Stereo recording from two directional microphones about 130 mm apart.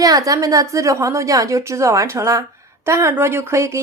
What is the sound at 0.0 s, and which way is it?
A woman's voice, 25° right (ahead or behind).